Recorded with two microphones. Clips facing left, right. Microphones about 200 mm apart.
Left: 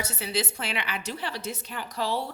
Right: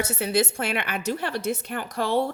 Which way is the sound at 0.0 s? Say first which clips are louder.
Right 7 dB; 50° right (ahead or behind).